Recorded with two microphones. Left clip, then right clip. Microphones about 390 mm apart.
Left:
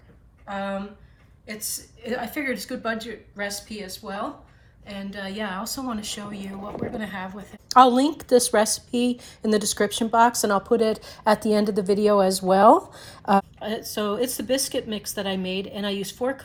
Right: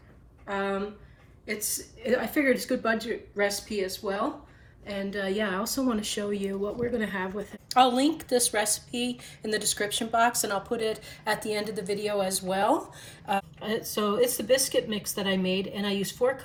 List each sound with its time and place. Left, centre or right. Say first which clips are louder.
0.4 s speech: even; centre
2.0 s speech: right 3 dB; centre
4.9 s speech: right 4 dB; centre
10.9 s speech: left 8 dB; left
11.8 s speech: left 11 dB; centre